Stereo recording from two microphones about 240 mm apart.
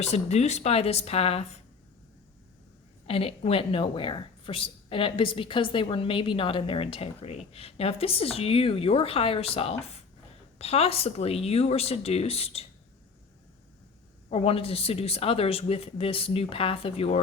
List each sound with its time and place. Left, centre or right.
0.0 s speech: left
3.1 s speech: left
14.3 s speech: left